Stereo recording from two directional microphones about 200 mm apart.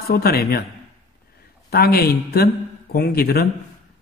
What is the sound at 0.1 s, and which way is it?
Speech, 50° left (ahead or behind).